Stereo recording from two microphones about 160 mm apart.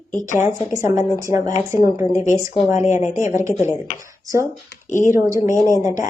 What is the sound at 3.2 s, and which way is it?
A woman's voice, 20° right (ahead or behind).